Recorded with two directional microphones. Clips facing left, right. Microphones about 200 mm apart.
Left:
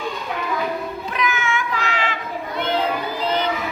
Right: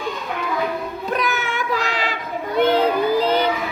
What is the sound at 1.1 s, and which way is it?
Child singing, 40° right (ahead or behind).